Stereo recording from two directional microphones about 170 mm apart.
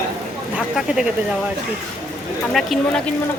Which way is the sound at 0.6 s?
5° right (ahead or behind).